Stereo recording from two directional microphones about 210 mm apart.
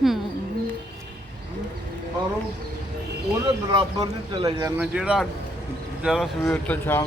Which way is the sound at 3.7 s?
20° right (ahead or behind).